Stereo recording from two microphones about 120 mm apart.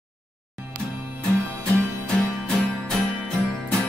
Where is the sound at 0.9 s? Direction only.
15° right (ahead or behind).